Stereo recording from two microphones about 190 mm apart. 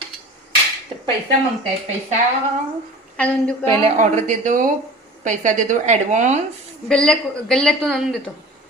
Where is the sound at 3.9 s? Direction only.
40° right (ahead or behind).